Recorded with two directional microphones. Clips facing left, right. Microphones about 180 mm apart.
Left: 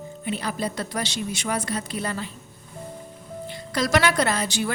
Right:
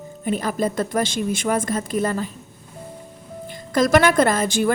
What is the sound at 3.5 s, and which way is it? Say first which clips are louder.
Speech: right 7 dB; 45° right (ahead or behind).